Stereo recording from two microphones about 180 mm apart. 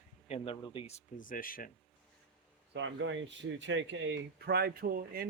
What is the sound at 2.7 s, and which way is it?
Speech, 90° right.